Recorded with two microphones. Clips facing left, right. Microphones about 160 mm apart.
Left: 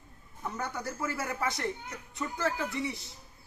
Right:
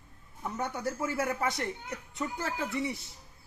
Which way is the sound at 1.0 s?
25° right (ahead or behind).